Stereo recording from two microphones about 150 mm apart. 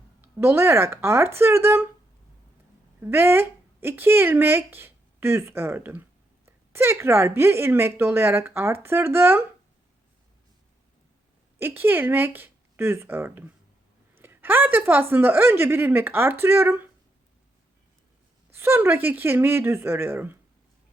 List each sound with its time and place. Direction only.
0.2 s a woman's voice: 15° right (ahead or behind)
3.0 s speech: 15° right (ahead or behind)
11.6 s a woman's voice: 15° right (ahead or behind)
18.5 s a woman's voice: 15° right (ahead or behind)